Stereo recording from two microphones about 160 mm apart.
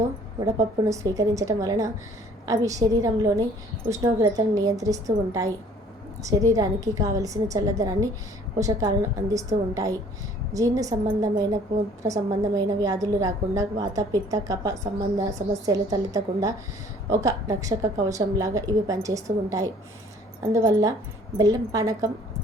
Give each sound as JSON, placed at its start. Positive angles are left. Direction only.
{"t": 0.3, "sound": "a woman's voice", "side_deg": -20}